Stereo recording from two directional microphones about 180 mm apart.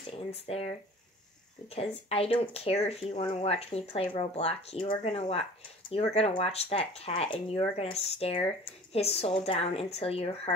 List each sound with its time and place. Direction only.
0.0 s speech: 35° left (ahead or behind)
1.8 s speech: 35° left (ahead or behind)